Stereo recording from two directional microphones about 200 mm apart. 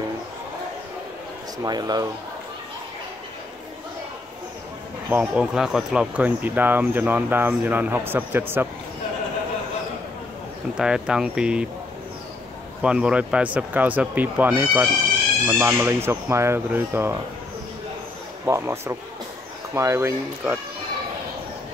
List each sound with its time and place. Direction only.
1.6 s speech: 20° right (ahead or behind)
5.1 s speech: 5° right (ahead or behind)
10.8 s speech: 5° right (ahead or behind)
12.8 s speech: 5° right (ahead or behind)
18.4 s speech: 10° right (ahead or behind)